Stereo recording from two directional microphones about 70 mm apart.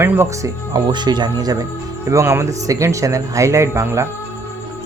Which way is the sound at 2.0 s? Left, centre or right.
Right.